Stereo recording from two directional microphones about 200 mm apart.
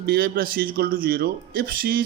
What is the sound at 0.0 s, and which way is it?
A man's voice, 50° right (ahead or behind).